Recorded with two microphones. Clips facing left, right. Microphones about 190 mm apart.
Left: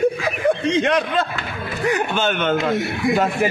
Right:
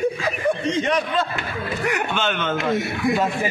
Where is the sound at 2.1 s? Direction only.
50° left (ahead or behind).